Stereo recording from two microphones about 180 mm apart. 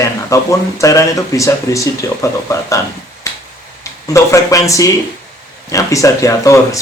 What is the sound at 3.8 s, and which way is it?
Speech, 15° left (ahead or behind).